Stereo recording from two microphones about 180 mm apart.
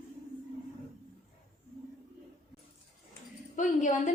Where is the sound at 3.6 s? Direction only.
45° left (ahead or behind).